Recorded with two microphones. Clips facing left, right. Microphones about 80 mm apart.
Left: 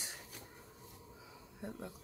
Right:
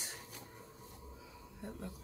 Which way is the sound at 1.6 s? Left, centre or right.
Centre.